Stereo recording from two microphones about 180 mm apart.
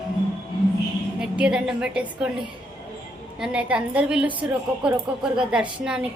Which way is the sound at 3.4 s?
5° right (ahead or behind).